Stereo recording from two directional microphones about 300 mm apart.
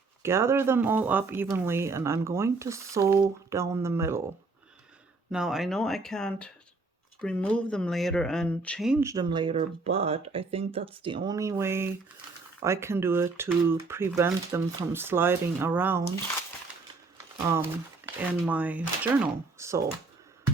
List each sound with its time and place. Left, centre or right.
0.2 s speech: centre
5.3 s speech: centre
17.3 s speech: centre